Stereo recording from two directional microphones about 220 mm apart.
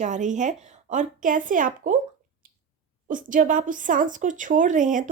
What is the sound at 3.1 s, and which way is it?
A woman's voice, 35° right (ahead or behind).